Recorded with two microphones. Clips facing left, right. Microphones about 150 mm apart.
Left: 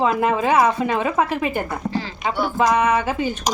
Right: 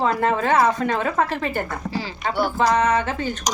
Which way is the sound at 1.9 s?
5° right (ahead or behind).